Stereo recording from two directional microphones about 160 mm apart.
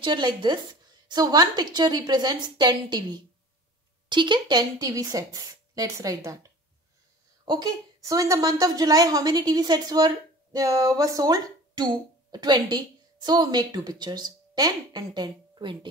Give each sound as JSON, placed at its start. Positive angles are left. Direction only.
{"t": 0.0, "sound": "a woman's voice", "side_deg": -30}